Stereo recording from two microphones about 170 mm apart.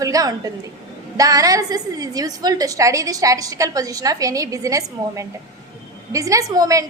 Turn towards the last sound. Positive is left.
turn(degrees=-20)  # may be behind; listen again after turning